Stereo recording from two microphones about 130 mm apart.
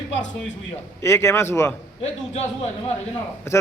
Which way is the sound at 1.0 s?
20° left (ahead or behind).